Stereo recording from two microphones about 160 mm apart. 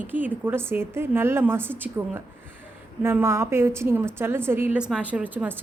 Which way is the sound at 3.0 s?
15° right (ahead or behind).